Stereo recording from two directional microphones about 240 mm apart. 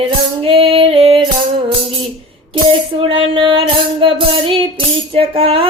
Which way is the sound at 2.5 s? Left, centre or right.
Right.